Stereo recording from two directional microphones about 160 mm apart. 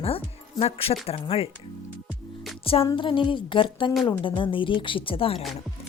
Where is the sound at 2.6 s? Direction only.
35° left (ahead or behind).